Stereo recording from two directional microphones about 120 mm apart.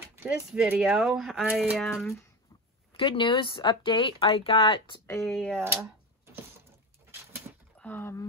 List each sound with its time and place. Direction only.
0.3 s speech: 5° right (ahead or behind)
2.9 s speech: 50° left (ahead or behind)
5.2 s speech: 5° left (ahead or behind)
5.6 s a sound: 20° right (ahead or behind)
7.8 s speech: 20° left (ahead or behind)